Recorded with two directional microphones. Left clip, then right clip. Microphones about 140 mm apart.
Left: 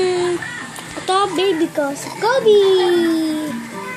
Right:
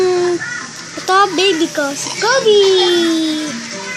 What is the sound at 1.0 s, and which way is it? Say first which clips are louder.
A child's voice: right 5 dB; 15° right (ahead or behind).